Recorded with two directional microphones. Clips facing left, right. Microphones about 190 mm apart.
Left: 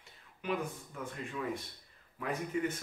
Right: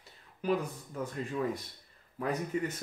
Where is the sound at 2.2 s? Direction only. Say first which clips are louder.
Right 3 dB; 35° right (ahead or behind).